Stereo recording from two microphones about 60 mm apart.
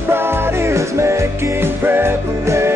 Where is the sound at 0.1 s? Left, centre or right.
Right.